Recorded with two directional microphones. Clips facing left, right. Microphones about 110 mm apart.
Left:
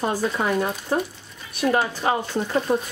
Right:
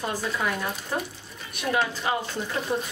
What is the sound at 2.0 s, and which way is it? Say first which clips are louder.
Speech: left 5 dB; 50° left (ahead or behind).